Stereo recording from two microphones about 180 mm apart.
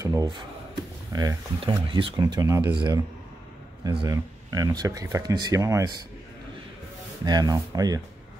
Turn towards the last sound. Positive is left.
turn(degrees=-20)  # may be behind; listen again after turning